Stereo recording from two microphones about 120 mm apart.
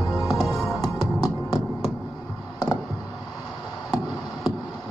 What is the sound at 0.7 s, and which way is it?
Music, 35° left (ahead or behind).